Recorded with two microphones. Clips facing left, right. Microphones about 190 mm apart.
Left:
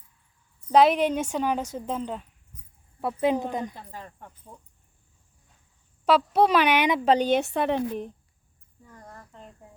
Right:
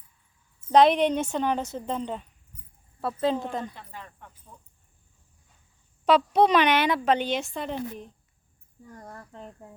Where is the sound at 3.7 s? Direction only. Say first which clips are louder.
Left 2 dB; 35° left (ahead or behind).